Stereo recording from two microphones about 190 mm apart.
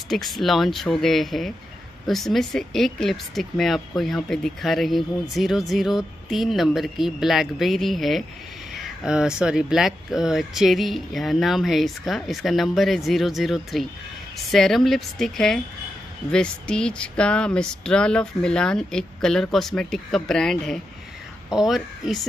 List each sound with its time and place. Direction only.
0.1 s speech: centre (ahead or behind)